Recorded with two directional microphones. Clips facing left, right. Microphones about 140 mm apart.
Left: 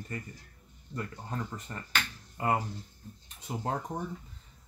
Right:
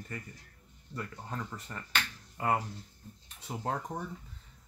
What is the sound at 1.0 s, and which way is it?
Speech, 25° left (ahead or behind).